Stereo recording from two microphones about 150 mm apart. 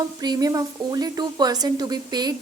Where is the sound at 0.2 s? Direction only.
25° right (ahead or behind).